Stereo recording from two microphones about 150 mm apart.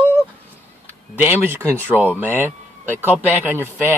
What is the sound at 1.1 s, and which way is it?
Speech, 15° right (ahead or behind).